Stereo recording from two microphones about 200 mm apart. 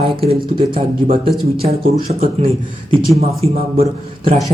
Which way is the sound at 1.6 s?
30° right (ahead or behind).